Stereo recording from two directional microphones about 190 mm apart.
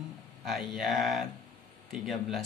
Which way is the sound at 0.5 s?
Centre (ahead or behind).